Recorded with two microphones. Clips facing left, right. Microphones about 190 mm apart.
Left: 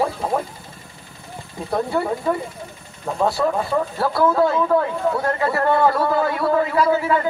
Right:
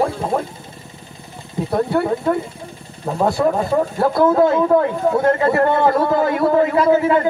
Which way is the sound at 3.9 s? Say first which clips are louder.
Right 4 dB; 20° right (ahead or behind).